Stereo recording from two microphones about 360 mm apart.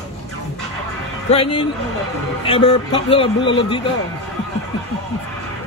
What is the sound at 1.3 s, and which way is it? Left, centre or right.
A man's voice, centre.